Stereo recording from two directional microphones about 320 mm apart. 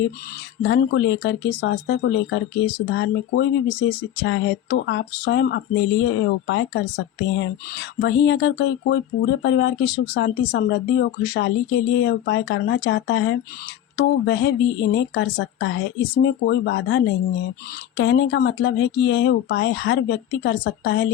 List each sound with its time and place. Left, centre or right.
0.6 s speech: left